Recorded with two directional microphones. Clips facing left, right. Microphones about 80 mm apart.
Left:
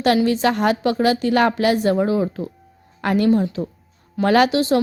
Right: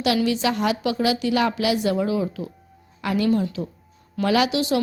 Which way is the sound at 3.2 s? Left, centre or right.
Left.